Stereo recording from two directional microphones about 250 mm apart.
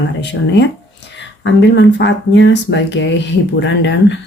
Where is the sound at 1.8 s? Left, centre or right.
Left.